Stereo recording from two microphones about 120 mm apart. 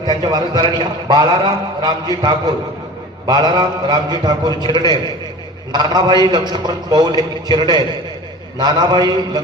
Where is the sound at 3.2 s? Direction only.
35° right (ahead or behind).